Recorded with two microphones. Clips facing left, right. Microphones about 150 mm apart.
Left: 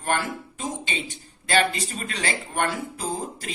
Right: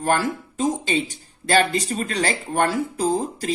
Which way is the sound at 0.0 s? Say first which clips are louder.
Right 5 dB; 40° right (ahead or behind).